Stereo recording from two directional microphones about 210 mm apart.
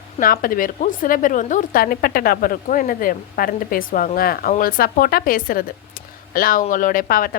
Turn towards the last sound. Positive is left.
turn(degrees=45)  # may be behind; listen again after turning